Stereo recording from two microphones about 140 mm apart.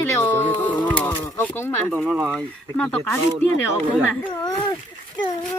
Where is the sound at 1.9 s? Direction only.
Centre (ahead or behind).